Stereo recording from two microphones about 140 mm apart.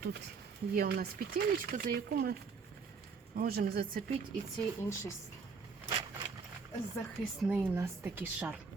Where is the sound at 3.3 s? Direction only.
90° right.